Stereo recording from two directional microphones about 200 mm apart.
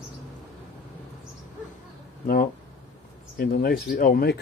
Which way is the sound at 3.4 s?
50° left (ahead or behind).